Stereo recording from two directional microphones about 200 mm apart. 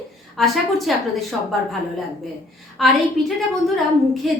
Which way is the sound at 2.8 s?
Centre (ahead or behind).